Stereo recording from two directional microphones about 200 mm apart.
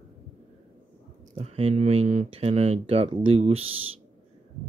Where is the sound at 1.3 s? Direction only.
30° right (ahead or behind).